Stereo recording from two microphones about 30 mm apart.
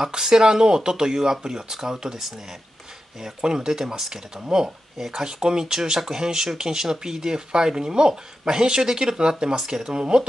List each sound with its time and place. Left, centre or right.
0.0 s speech: right
3.3 s speech: right